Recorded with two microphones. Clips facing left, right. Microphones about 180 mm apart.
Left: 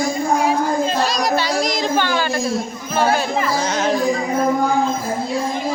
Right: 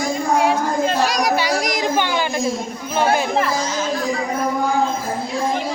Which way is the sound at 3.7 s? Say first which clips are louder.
Left 4 dB; 65° left (ahead or behind).